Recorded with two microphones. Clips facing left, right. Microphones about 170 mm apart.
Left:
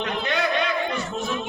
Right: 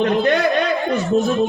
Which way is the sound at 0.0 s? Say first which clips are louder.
Right 11 dB; 45° right (ahead or behind).